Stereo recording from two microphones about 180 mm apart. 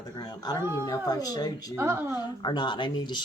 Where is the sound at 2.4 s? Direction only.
25° left (ahead or behind).